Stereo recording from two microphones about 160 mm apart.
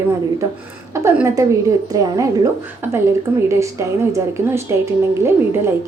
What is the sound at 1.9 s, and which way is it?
Speech, 20° right (ahead or behind).